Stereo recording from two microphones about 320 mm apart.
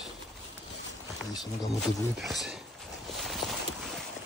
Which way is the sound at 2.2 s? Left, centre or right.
Centre.